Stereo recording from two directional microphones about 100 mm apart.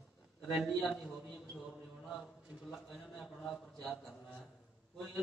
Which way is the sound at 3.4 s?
10° left (ahead or behind).